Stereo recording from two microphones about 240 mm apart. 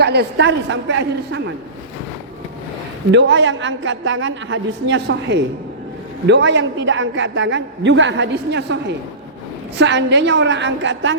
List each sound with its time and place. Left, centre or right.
0.0 s a woman's voice: right
3.1 s a woman's voice: right